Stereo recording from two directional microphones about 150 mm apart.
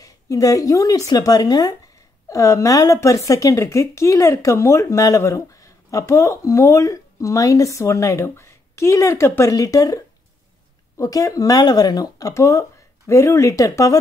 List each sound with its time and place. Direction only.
0.0 s a woman's voice: 25° left (ahead or behind)
11.0 s a woman's voice: 20° left (ahead or behind)